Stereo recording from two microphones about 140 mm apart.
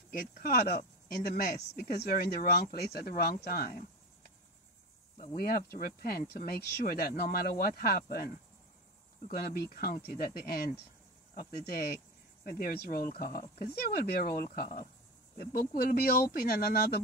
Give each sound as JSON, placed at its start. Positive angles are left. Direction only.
{"t": 0.1, "sound": "speech", "side_deg": 90}
{"t": 5.4, "sound": "speech", "side_deg": 90}
{"t": 9.3, "sound": "speech", "side_deg": 90}